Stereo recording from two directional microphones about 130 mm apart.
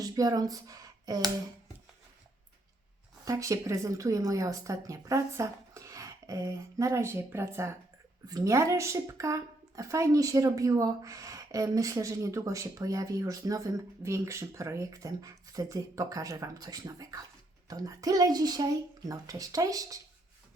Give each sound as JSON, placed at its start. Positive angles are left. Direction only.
{"t": 0.0, "sound": "speech", "side_deg": -30}
{"t": 3.2, "sound": "speech", "side_deg": -25}